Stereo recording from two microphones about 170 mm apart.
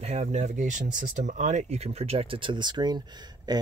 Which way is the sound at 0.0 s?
40° right (ahead or behind).